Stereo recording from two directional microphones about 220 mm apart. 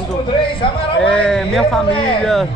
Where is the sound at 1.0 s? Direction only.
5° left (ahead or behind).